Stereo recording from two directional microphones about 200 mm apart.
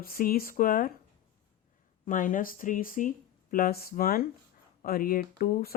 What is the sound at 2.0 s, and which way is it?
Speech, 40° left (ahead or behind).